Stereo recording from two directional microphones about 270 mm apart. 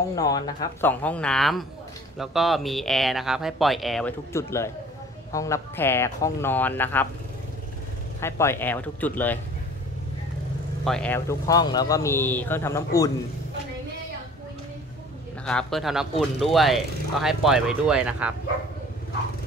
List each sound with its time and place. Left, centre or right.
0.1 s speech: centre
8.2 s speech: centre
10.8 s speech: centre
15.4 s speech: centre